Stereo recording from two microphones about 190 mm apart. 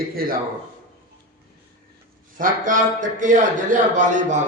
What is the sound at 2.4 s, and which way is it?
A man's voice, 45° right (ahead or behind).